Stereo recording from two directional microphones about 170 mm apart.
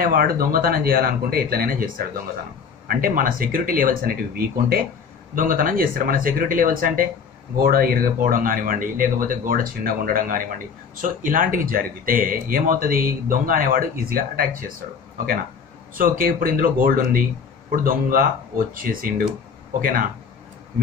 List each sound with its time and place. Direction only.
0.0 s speech: 55° right (ahead or behind)
15.9 s speech: 55° right (ahead or behind)